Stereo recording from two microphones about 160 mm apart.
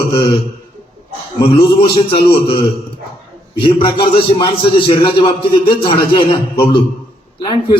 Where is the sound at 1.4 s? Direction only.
35° left (ahead or behind).